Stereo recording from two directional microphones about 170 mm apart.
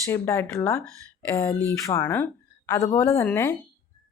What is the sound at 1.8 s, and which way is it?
A woman's voice, 15° left (ahead or behind).